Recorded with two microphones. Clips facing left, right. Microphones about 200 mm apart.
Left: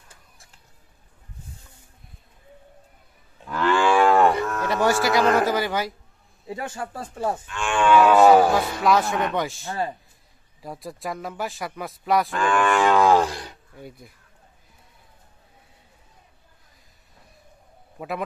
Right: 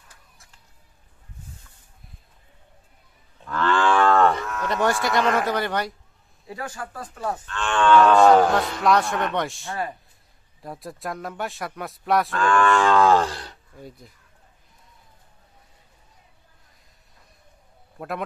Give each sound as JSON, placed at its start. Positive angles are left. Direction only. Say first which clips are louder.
{"t": 3.4, "sound": "moo", "louder": "left 1 dB", "side_deg": 10}
{"t": 4.6, "sound": "speech", "louder": "left 1 dB", "side_deg": 5}
{"t": 6.4, "sound": "speech", "louder": "left 3 dB", "side_deg": 25}
{"t": 7.4, "sound": "livestock", "louder": "right 1 dB", "side_deg": 10}
{"t": 10.6, "sound": "speech", "louder": "left 1 dB", "side_deg": 0}
{"t": 12.4, "sound": "livestock", "louder": "right 3 dB", "side_deg": 15}
{"t": 13.7, "sound": "speech", "louder": "even", "side_deg": 5}
{"t": 17.9, "sound": "a man's voice", "louder": "left 1 dB", "side_deg": 0}